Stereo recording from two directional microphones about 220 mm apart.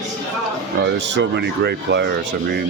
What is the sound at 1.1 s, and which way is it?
Speech, 50° right (ahead or behind).